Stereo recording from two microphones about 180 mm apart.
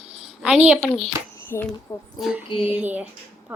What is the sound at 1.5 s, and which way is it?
Speech, 10° left (ahead or behind).